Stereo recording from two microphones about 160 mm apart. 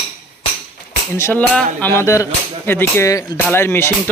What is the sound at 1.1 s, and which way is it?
Speech, 15° left (ahead or behind).